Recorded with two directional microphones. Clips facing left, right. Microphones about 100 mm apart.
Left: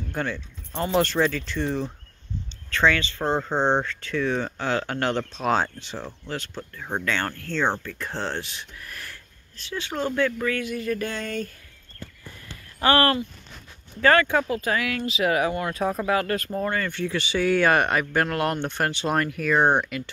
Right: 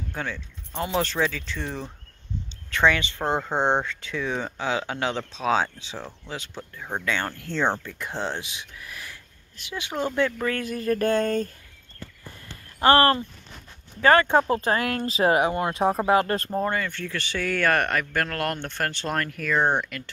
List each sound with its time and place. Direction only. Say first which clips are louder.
0.1 s speech: left 4 dB; centre (ahead or behind)
2.7 s speech: even; 15° right (ahead or behind)
10.5 s speech: right 1 dB; 40° right (ahead or behind)
12.8 s speech: right 2 dB; 30° right (ahead or behind)
14.5 s speech: right 2 dB; 40° right (ahead or behind)
16.9 s speech: left 5 dB; 15° left (ahead or behind)